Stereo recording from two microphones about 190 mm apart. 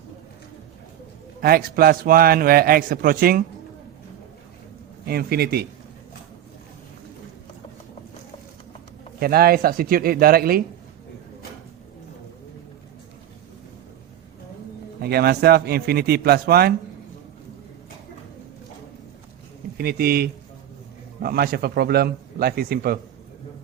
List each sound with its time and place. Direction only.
1.4 s a man's voice: 50° right (ahead or behind)
5.0 s speech: 55° right (ahead or behind)
9.2 s a man's voice: 50° right (ahead or behind)
15.0 s speech: 55° right (ahead or behind)
19.7 s a man's voice: 55° right (ahead or behind)